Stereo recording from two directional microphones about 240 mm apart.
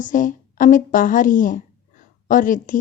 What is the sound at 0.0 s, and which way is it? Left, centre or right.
A woman's voice, left.